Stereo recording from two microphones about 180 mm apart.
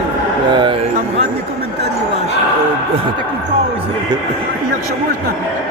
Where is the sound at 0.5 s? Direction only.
25° right (ahead or behind).